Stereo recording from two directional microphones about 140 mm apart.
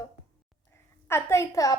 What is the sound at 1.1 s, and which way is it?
Speech, 20° left (ahead or behind).